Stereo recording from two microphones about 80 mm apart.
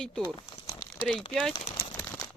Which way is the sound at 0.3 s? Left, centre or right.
Left.